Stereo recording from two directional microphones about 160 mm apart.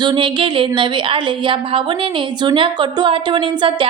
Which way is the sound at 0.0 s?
30° right (ahead or behind).